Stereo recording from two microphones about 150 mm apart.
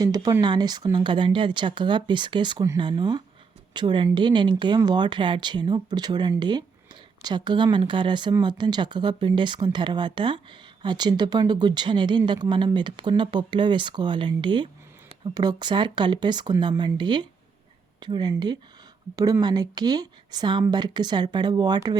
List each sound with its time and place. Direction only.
0.0 s a woman's voice: 25° right (ahead or behind)